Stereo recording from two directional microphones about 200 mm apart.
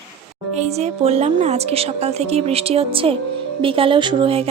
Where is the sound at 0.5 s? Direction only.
35° right (ahead or behind).